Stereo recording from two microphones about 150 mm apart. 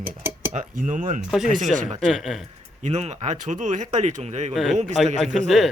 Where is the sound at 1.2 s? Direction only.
Centre (ahead or behind).